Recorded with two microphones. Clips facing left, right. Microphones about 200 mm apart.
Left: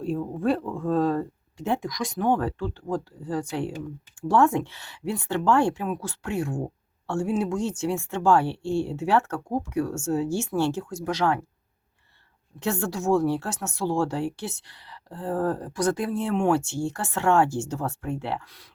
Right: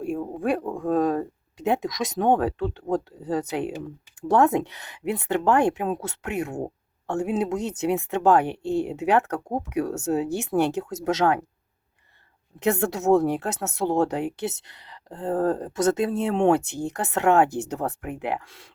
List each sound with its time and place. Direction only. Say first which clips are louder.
0.2 s speech: even; 15° right (ahead or behind)
12.5 s speech: right 4 dB; 20° right (ahead or behind)